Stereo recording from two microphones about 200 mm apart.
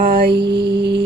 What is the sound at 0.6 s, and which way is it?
Mantra, 55° right (ahead or behind).